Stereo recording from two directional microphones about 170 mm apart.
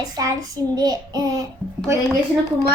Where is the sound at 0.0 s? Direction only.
20° right (ahead or behind).